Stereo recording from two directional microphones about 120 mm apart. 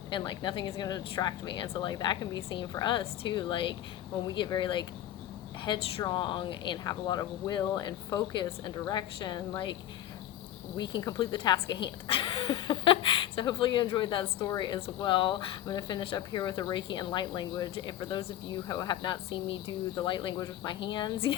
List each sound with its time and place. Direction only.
0.1 s a woman's voice: 40° left (ahead or behind)
10.8 s a woman's voice: 35° left (ahead or behind)
19.0 s a woman's voice: 40° left (ahead or behind)